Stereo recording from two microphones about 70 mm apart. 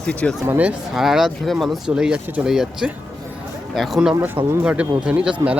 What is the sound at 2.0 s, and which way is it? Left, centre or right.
Speech, centre.